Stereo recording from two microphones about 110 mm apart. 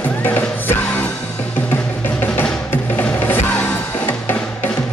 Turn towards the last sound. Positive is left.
turn(degrees=15)  # may be behind; listen again after turning